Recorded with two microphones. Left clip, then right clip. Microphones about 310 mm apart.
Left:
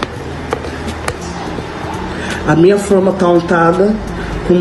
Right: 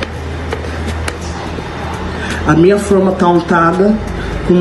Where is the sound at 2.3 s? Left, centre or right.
Centre.